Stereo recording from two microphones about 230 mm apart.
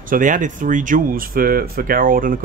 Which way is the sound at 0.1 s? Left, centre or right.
Right.